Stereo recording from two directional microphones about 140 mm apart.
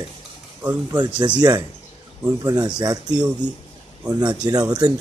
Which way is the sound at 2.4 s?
25° right (ahead or behind).